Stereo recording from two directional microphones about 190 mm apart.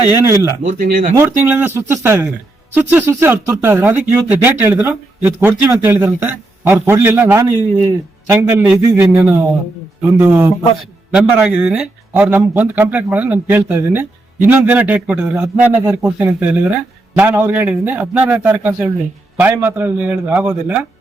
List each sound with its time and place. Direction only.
0.2 s speech: 15° right (ahead or behind)
0.8 s speech: 50° right (ahead or behind)
1.1 s speech: 10° right (ahead or behind)